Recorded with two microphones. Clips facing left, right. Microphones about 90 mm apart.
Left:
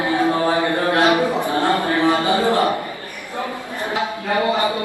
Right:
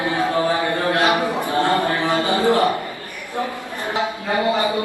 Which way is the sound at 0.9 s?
20° left (ahead or behind).